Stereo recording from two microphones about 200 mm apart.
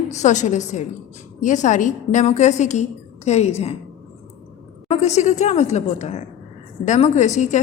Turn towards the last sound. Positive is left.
turn(degrees=35)  # may be behind; listen again after turning